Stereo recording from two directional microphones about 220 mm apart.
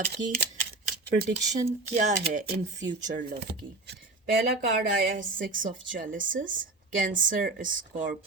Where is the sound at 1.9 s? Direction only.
35° right (ahead or behind).